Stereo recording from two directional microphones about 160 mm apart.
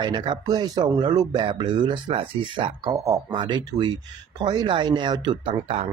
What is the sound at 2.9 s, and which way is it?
Speech, 20° right (ahead or behind).